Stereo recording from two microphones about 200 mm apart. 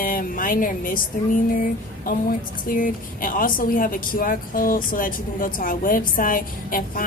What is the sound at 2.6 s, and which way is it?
A woman's voice, 45° left (ahead or behind).